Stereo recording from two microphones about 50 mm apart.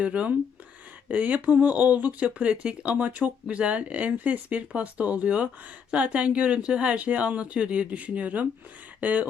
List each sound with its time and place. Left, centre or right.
0.0 s speech: right